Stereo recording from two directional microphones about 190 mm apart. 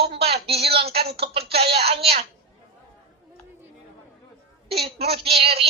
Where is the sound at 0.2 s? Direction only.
30° right (ahead or behind).